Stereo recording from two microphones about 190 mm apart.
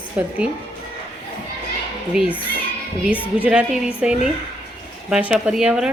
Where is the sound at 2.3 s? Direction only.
10° left (ahead or behind).